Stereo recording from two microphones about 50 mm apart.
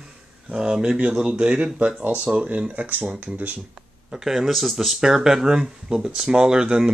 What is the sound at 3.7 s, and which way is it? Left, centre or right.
Speech, centre.